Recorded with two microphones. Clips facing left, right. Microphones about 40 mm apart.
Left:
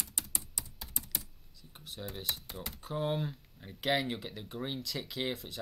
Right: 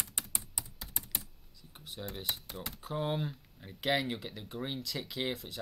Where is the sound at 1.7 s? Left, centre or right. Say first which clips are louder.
Even; centre.